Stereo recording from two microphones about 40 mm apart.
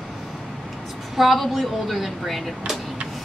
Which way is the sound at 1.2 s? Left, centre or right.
Centre.